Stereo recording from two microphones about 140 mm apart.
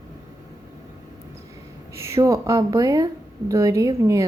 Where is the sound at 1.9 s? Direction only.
20° right (ahead or behind).